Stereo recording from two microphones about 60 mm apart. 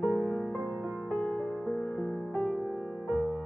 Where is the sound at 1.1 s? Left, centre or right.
Centre.